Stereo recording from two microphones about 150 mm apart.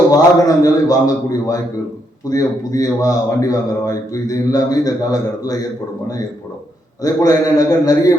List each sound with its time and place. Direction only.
0.1 s a man's voice: 25° left (ahead or behind)
7.0 s a man's voice: 20° left (ahead or behind)